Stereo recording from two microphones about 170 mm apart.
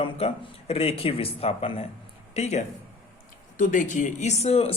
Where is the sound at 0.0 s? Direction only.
35° left (ahead or behind).